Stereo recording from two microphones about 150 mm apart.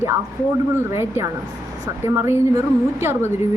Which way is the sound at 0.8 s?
15° right (ahead or behind).